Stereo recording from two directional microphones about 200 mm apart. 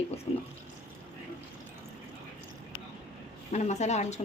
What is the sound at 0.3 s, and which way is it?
Speech, 30° left (ahead or behind).